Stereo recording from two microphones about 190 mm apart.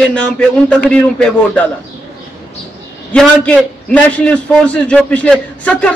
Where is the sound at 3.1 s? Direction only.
5° left (ahead or behind).